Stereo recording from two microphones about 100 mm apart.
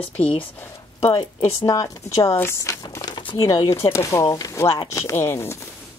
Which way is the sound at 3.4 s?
30° left (ahead or behind).